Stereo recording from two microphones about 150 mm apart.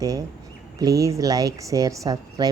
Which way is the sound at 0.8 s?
20° right (ahead or behind).